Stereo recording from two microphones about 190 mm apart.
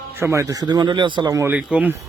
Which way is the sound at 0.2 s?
15° right (ahead or behind).